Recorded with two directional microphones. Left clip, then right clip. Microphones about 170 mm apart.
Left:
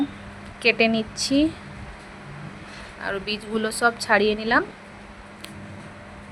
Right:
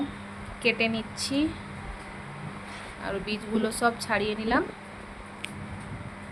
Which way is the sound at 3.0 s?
40° left (ahead or behind).